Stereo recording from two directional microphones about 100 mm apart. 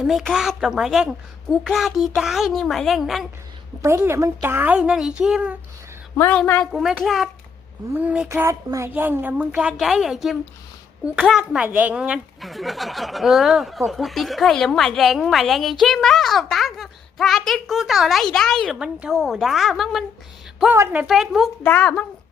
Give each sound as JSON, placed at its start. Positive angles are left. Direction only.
{"t": 0.0, "sound": "speech", "side_deg": 0}
{"t": 3.8, "sound": "a woman's voice", "side_deg": -25}
{"t": 6.3, "sound": "a woman's voice", "side_deg": 15}
{"t": 6.7, "sound": "speech", "side_deg": 0}
{"t": 7.9, "sound": "a child's voice", "side_deg": -15}
{"t": 8.3, "sound": "a woman's voice", "side_deg": -30}
{"t": 9.7, "sound": "speech", "side_deg": 0}
{"t": 11.6, "sound": "speech", "side_deg": -15}
{"t": 18.8, "sound": "speech", "side_deg": -5}
{"t": 20.7, "sound": "a woman's voice", "side_deg": -25}
{"t": 21.1, "sound": "speech", "side_deg": -5}
{"t": 21.6, "sound": "a woman's voice", "side_deg": 15}